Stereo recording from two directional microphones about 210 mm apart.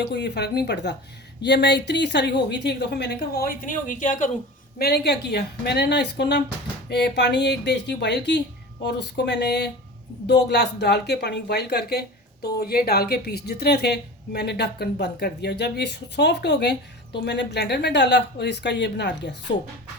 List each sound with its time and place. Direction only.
0.0 s speech: 55° left (ahead or behind); by 4.3 s 35° left (ahead or behind)
4.8 s speech: 50° left (ahead or behind)